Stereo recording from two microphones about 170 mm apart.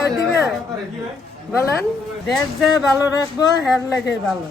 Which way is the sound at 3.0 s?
20° left (ahead or behind).